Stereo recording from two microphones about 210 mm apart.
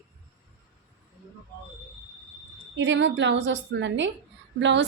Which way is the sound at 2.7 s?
60° right (ahead or behind).